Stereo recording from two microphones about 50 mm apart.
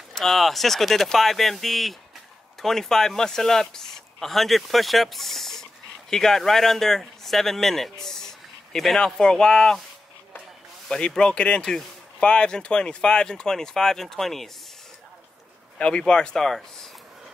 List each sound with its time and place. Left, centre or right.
0.1 s speech: centre
10.9 s speech: centre
15.8 s speech: centre